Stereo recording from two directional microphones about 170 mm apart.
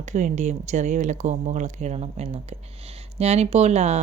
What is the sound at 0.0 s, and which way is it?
Speech, 45° right (ahead or behind).